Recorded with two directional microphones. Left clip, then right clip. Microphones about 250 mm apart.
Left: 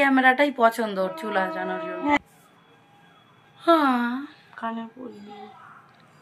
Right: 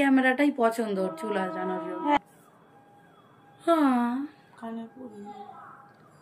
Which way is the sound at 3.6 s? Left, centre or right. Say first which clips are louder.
Left 4 dB; centre.